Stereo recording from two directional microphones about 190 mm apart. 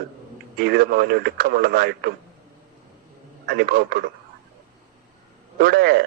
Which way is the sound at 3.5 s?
55° right (ahead or behind).